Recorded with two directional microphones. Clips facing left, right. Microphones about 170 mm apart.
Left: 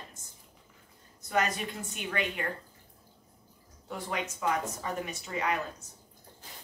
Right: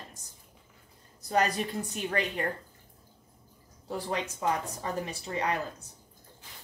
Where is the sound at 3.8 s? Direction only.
30° right (ahead or behind).